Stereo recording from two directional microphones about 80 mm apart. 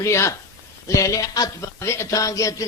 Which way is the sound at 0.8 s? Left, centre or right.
Left.